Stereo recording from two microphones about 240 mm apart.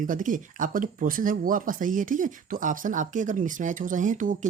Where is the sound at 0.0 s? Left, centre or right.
Right.